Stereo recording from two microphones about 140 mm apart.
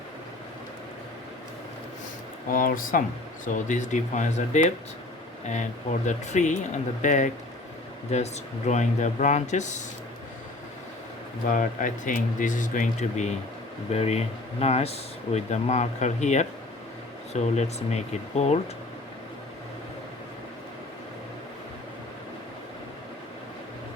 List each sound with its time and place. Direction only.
2.5 s speech: 90° left
3.4 s speech: 65° left (ahead or behind)
6.1 s speech: 60° left (ahead or behind)
11.4 s speech: 70° left (ahead or behind); by 18.6 s 50° left (ahead or behind)